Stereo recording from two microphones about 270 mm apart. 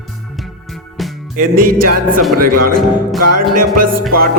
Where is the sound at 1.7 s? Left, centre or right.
Right.